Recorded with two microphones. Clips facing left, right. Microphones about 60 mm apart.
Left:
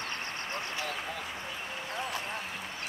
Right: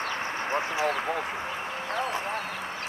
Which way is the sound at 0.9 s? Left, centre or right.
Right.